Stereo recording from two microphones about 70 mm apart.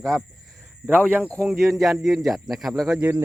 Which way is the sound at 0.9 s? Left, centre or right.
Right.